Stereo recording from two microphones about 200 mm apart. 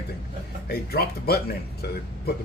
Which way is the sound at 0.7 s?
50° left (ahead or behind).